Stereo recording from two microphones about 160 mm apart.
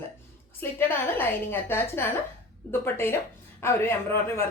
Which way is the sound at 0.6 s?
15° left (ahead or behind).